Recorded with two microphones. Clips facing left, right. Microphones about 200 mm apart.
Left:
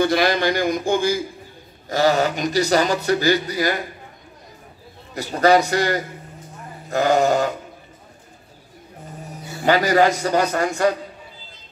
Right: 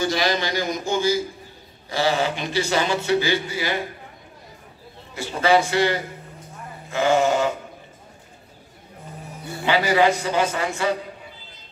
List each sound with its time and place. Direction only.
0.0 s speech: 55° left (ahead or behind)
1.9 s speech: 45° left (ahead or behind)
5.1 s speech: 40° left (ahead or behind)
9.7 s a man's voice: 40° left (ahead or behind)